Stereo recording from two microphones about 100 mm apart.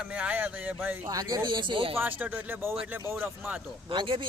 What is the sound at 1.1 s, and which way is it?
Speech, 40° right (ahead or behind).